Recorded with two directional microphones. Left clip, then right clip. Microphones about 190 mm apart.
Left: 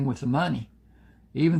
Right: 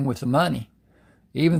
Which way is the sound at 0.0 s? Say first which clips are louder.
Right 5 dB; 50° right (ahead or behind).